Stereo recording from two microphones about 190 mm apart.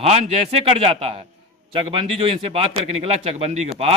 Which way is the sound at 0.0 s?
30° right (ahead or behind).